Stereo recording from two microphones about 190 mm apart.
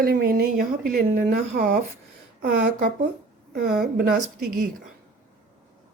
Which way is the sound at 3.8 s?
55° right (ahead or behind).